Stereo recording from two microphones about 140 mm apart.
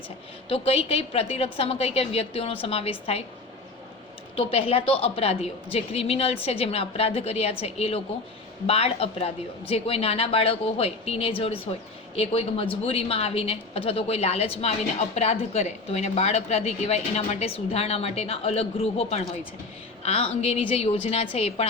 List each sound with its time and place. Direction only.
0.4 s a woman's voice: 45° left (ahead or behind)
4.4 s a woman's voice: 45° left (ahead or behind)